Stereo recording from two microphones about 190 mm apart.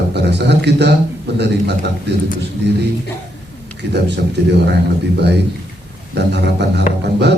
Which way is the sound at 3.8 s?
65° right (ahead or behind).